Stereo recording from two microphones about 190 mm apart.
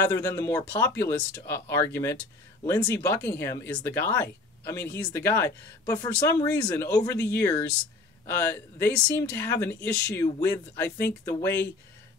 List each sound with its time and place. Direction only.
0.0 s speech: 15° left (ahead or behind)